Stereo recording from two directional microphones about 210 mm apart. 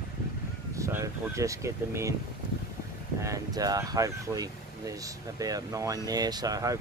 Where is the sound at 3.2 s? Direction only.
15° right (ahead or behind).